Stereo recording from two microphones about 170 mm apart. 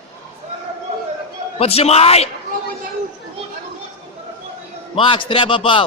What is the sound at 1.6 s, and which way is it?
Speech, 35° left (ahead or behind).